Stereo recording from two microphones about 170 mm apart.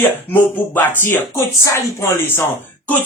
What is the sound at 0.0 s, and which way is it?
Speech, 10° left (ahead or behind).